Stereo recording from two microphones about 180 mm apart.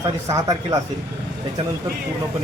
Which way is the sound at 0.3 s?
20° right (ahead or behind).